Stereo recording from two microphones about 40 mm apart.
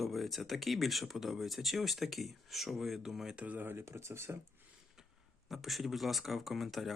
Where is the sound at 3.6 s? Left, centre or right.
Right.